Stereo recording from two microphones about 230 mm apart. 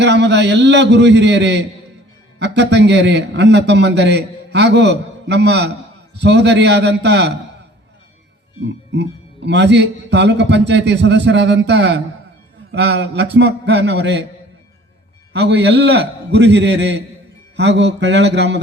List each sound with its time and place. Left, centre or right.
0.0 s a man's voice: right
8.9 s a man's voice: right
15.3 s a man's voice: right